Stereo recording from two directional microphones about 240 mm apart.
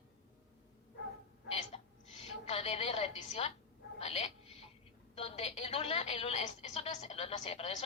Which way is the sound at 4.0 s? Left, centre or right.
Left.